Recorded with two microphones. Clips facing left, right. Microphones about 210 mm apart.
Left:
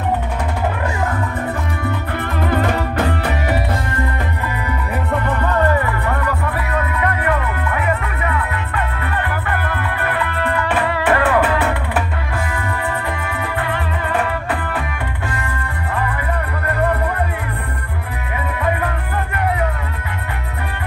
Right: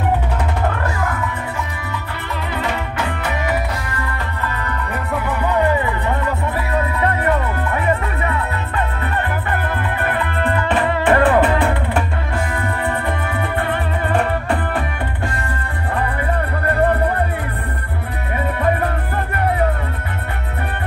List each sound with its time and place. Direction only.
1.8 s music: 55° left (ahead or behind)
5.1 s music: 5° right (ahead or behind); by 9.1 s 30° right (ahead or behind)
10.3 s music: 25° right (ahead or behind)
13.7 s music: 30° right (ahead or behind)